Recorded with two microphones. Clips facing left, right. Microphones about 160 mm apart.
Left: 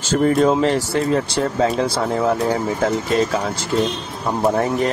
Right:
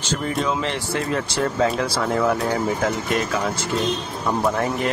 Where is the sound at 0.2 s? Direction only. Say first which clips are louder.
Left 10 dB; 45° left (ahead or behind).